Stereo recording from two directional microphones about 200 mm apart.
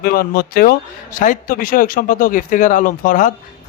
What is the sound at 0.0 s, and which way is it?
Speech, 50° left (ahead or behind).